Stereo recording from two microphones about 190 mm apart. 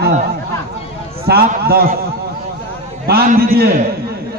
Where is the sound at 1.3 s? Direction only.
55° right (ahead or behind).